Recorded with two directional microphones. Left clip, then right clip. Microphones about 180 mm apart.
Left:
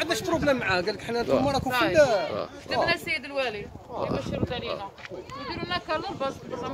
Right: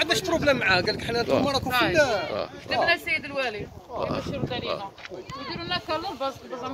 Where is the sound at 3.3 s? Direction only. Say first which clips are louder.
Even; 30° left (ahead or behind).